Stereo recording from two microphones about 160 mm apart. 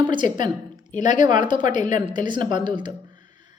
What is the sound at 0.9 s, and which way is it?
Speech, 50° left (ahead or behind).